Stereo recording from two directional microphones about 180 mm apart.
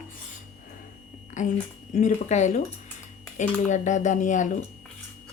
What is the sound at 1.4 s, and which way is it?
Speech, 45° left (ahead or behind).